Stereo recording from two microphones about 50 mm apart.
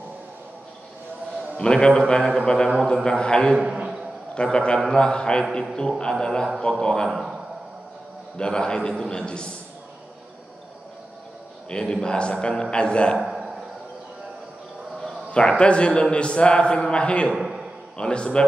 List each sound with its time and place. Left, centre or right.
1.6 s a man's voice: centre
3.5 s a sound: right
4.4 s a man's voice: centre
8.4 s a man's voice: centre
11.8 s a man's voice: centre
13.2 s a sound: centre
15.3 s a man's voice: left
17.4 s a sound: centre
17.9 s a man's voice: centre